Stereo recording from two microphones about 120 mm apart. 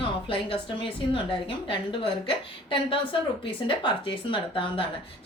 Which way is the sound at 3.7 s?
45° left (ahead or behind).